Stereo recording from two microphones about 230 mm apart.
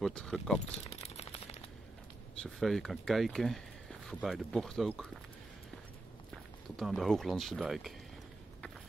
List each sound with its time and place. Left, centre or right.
0.0 s speech: centre
0.7 s typewriter: left
2.4 s speech: centre
6.8 s speech: centre